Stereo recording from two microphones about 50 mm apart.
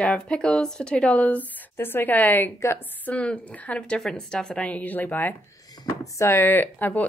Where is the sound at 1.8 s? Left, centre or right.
Left.